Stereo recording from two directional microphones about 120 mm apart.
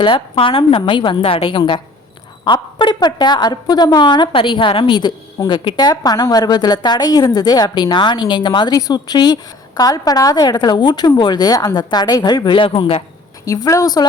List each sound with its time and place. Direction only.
0.0 s a woman's voice: 45° left (ahead or behind)
13.4 s a woman's voice: 30° left (ahead or behind)